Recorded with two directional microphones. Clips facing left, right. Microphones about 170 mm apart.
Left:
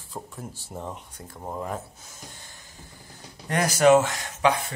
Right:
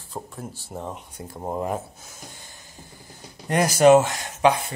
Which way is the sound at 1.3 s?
25° right (ahead or behind).